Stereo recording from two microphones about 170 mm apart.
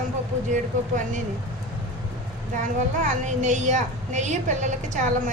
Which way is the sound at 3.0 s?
45° right (ahead or behind).